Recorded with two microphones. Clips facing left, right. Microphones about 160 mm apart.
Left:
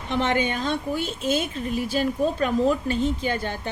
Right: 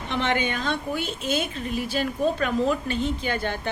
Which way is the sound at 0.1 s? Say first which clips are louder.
Left 2 dB; 40° left (ahead or behind).